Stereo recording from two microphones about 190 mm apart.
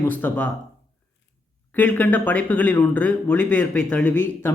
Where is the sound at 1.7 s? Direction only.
10° left (ahead or behind).